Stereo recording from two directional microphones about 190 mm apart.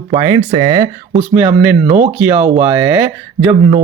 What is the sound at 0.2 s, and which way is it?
Speech, 20° right (ahead or behind).